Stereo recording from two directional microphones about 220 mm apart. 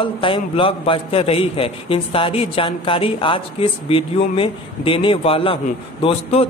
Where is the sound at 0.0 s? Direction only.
25° left (ahead or behind).